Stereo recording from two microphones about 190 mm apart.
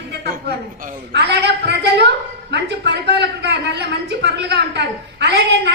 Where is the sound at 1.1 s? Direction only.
60° right (ahead or behind).